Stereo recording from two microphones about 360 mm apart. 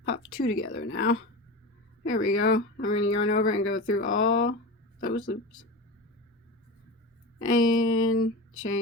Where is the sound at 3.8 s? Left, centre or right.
Left.